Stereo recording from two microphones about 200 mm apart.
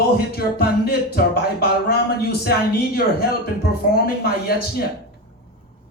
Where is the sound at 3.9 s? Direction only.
50° left (ahead or behind).